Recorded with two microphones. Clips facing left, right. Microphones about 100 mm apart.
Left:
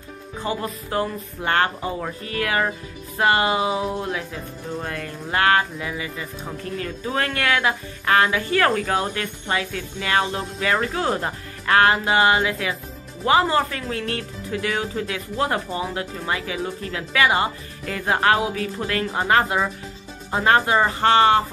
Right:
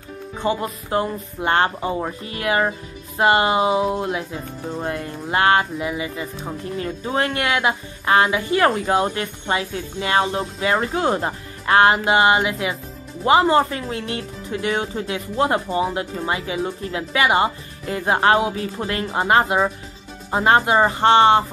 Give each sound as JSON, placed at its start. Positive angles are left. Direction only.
{"t": 0.4, "sound": "speech", "side_deg": -25}